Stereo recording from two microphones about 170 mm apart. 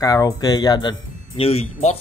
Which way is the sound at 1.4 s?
35° left (ahead or behind).